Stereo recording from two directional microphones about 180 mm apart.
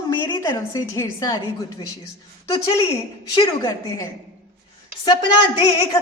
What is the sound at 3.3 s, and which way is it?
Speech, 25° left (ahead or behind).